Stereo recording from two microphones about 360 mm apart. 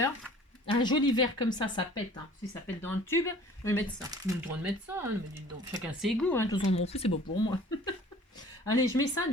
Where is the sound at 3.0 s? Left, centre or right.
Centre.